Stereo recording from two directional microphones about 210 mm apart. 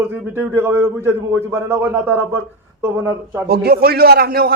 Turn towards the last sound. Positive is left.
turn(degrees=-45)  # may be behind; listen again after turning